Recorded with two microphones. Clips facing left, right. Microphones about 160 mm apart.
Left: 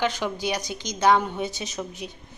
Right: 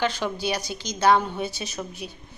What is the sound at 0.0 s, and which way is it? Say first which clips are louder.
Speech: even; 15° left (ahead or behind).